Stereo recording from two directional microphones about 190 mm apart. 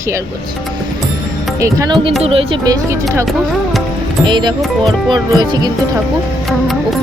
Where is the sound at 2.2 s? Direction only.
30° right (ahead or behind).